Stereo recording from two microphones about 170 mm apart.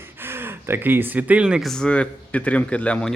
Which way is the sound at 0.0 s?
15° right (ahead or behind).